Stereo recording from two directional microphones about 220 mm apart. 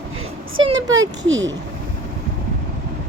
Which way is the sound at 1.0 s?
60° right (ahead or behind).